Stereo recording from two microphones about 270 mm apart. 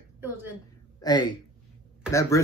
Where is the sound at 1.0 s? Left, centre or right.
Centre.